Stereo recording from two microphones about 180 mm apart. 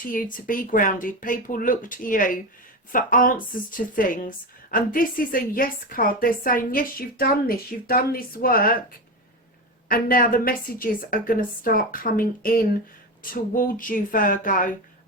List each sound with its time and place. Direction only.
0.0 s speech: 50° left (ahead or behind)
9.9 s speech: 55° left (ahead or behind)